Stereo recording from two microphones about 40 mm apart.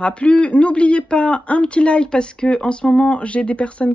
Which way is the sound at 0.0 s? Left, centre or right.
Left.